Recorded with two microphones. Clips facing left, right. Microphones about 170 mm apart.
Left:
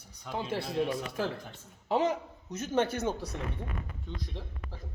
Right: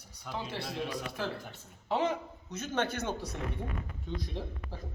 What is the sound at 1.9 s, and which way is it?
Speech, 40° left (ahead or behind).